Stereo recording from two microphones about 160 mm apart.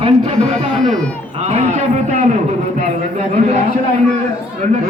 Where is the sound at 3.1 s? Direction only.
45° right (ahead or behind).